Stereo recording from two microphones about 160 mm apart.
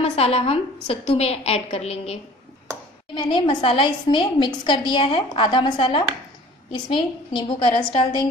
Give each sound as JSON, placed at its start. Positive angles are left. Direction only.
{"t": 0.0, "sound": "a woman's voice", "side_deg": 40}
{"t": 3.2, "sound": "a woman's voice", "side_deg": 30}